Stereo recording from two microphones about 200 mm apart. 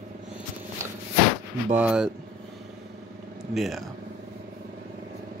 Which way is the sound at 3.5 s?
Centre (ahead or behind).